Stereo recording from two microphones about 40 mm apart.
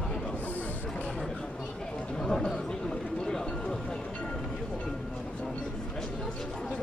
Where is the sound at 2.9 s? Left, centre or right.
Centre.